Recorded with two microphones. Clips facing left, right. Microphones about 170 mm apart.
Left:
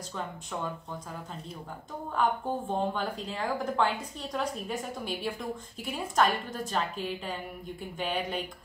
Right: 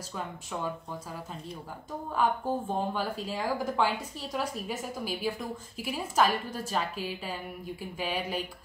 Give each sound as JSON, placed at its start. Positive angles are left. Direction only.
{"t": 2.1, "sound": "speech", "side_deg": -5}